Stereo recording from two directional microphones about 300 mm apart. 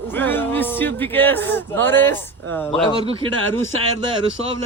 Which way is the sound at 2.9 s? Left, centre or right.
Centre.